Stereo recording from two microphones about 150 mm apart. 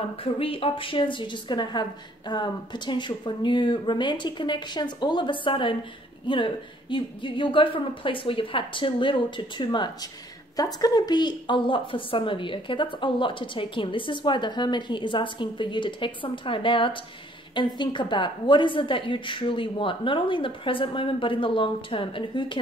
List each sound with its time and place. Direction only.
0.2 s a woman's voice: 40° left (ahead or behind)